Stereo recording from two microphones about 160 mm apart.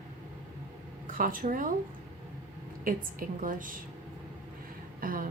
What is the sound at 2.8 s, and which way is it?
Speech, 60° right (ahead or behind).